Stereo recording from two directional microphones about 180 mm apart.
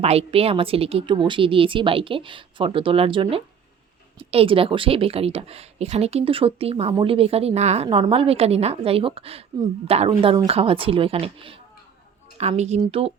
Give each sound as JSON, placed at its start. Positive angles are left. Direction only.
{"t": 0.0, "sound": "a woman's voice", "side_deg": -35}